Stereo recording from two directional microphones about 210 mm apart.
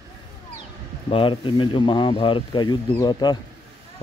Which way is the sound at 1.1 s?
25° left (ahead or behind).